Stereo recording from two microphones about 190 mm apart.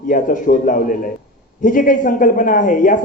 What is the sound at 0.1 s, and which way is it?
Speech, 45° left (ahead or behind).